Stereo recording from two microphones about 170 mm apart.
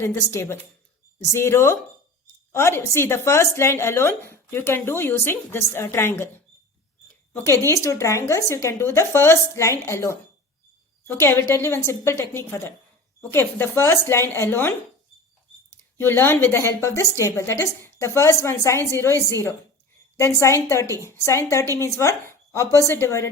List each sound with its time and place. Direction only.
0.0 s a woman's voice: 15° left (ahead or behind)
7.4 s a woman's voice: 15° left (ahead or behind)
15.7 s a woman's voice: 15° left (ahead or behind)